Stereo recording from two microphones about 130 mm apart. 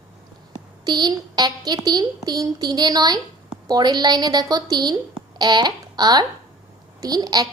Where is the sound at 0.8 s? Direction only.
30° right (ahead or behind).